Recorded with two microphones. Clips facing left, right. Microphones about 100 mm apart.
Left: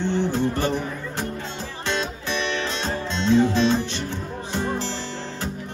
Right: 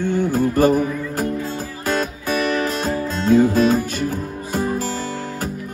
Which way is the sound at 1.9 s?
45° right (ahead or behind).